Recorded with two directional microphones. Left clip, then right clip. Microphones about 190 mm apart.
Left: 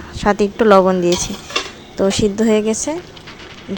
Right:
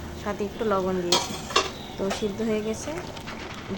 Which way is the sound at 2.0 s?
45° left (ahead or behind).